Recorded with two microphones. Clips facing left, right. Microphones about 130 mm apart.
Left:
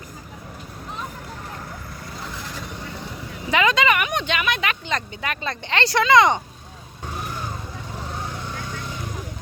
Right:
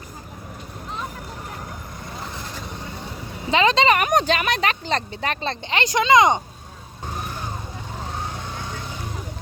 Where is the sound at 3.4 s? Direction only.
30° right (ahead or behind).